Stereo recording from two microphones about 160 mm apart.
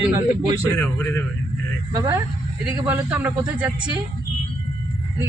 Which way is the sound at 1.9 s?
20° right (ahead or behind).